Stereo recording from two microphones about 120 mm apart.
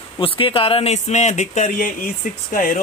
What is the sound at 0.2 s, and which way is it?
Speech, 50° left (ahead or behind).